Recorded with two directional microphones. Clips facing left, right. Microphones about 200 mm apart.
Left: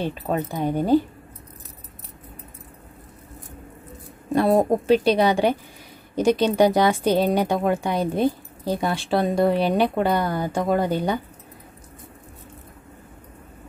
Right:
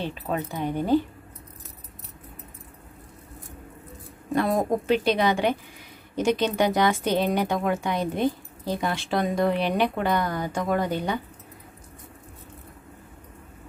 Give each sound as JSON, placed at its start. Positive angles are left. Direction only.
{"t": 0.3, "sound": "speech", "side_deg": 40}
{"t": 4.3, "sound": "speech", "side_deg": 35}